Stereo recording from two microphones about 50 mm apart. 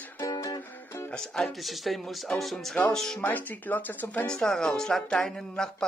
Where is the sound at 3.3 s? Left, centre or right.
Left.